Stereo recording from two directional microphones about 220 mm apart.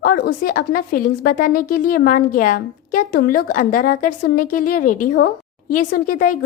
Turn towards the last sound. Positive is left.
turn(degrees=40)  # may be behind; listen again after turning